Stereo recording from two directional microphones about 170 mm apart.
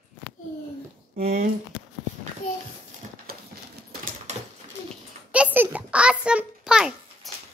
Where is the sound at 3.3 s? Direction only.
65° right (ahead or behind).